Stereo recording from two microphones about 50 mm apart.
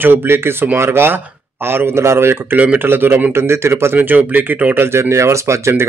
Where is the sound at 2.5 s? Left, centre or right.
Right.